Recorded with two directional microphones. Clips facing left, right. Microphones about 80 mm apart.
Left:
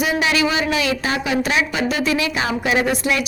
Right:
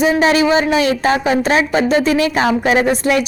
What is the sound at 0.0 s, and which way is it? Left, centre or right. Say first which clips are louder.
A woman's voice: right 6 dB; right.